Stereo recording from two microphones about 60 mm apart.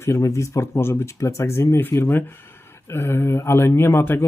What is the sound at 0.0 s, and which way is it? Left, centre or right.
Speech, left.